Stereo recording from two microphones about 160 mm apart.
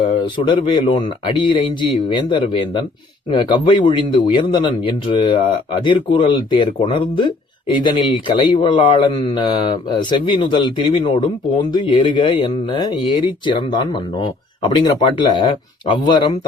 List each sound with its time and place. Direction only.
0.0 s speech: 30° left (ahead or behind)